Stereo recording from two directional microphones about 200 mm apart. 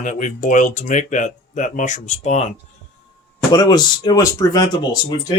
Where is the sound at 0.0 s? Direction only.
40° left (ahead or behind).